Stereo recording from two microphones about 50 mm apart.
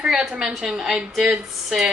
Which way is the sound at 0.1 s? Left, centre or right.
Centre.